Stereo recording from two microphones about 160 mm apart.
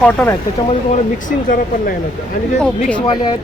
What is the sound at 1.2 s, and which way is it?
Speech, 60° left (ahead or behind).